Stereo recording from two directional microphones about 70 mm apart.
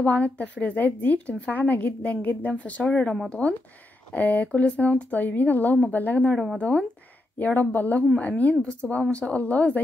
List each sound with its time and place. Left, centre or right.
0.0 s a woman's voice: left
6.3 s speech: centre
7.3 s a woman's voice: left